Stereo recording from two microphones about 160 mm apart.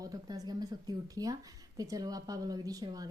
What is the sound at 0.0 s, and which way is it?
A woman's voice, 25° right (ahead or behind).